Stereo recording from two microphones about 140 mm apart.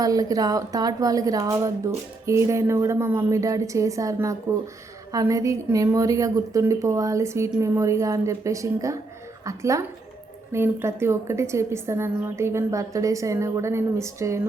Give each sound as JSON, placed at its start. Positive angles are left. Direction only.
{"t": 0.0, "sound": "a woman's voice", "side_deg": -25}